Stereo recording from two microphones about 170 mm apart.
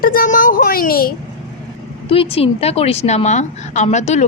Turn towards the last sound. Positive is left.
turn(degrees=45)  # may be behind; listen again after turning